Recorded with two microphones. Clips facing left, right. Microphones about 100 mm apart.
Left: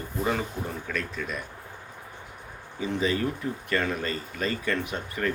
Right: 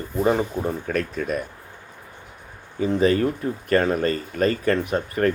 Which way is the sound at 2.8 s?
45° right (ahead or behind).